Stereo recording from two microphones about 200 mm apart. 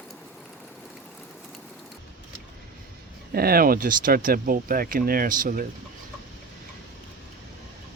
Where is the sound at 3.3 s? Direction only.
50° right (ahead or behind).